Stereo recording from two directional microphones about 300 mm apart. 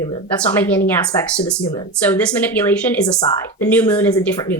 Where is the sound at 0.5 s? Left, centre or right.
Centre.